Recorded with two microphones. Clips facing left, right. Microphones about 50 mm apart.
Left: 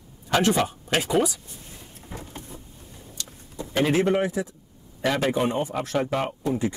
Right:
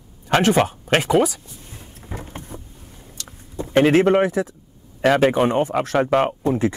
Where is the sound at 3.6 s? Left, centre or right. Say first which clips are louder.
Right 7 dB; right.